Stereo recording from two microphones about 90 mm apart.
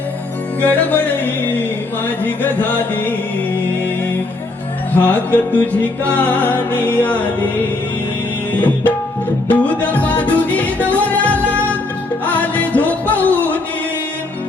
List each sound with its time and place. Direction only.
0.6 s music: 20° left (ahead or behind)
4.9 s music: 20° left (ahead or behind)
9.5 s music: 15° left (ahead or behind)